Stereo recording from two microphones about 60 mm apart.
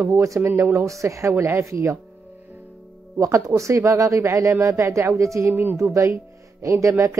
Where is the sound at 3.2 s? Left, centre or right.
Right.